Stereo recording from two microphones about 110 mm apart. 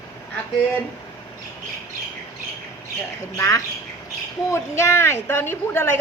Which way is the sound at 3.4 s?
35° left (ahead or behind).